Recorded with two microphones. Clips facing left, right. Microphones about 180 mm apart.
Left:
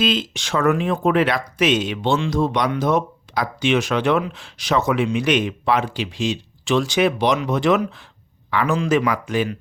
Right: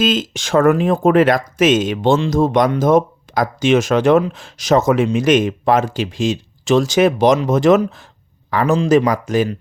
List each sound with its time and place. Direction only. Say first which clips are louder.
0.0 s speech: right 4 dB; 45° right (ahead or behind)